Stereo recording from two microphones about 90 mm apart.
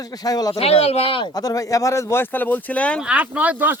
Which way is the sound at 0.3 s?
45° left (ahead or behind).